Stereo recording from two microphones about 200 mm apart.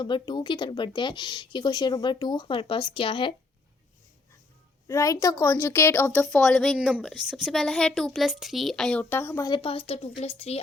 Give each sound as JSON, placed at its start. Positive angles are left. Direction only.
{"t": 0.0, "sound": "speech", "side_deg": 20}
{"t": 4.9, "sound": "a woman's voice", "side_deg": 15}
{"t": 6.3, "sound": "a woman's voice", "side_deg": 0}
{"t": 9.5, "sound": "a woman's voice", "side_deg": 25}